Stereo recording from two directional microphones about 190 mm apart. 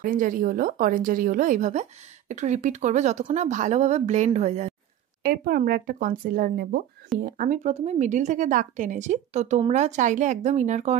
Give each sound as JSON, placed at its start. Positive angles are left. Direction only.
{"t": 0.0, "sound": "speech", "side_deg": -45}
{"t": 5.2, "sound": "speech", "side_deg": -50}